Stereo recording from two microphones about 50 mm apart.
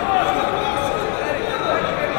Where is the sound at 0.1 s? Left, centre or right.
Left.